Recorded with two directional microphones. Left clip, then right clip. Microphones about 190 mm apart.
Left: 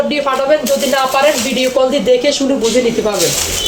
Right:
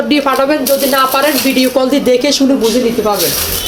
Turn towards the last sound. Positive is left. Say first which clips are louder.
# even
turn(degrees=-40)  # may be behind; listen again after turning